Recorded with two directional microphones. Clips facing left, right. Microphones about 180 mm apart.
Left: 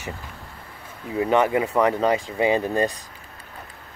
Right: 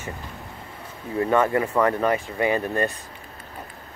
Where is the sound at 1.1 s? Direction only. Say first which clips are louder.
Left 1 dB; 15° left (ahead or behind).